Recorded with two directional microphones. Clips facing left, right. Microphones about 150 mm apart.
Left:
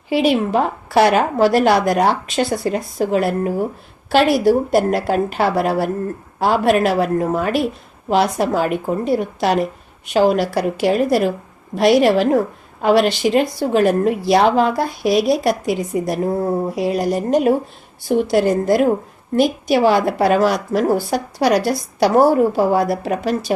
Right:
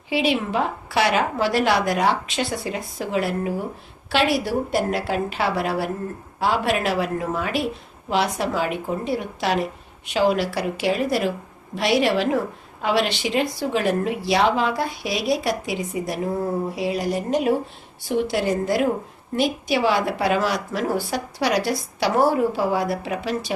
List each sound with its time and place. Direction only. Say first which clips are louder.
0.1 s a woman's voice: left 6 dB; 45° left (ahead or behind)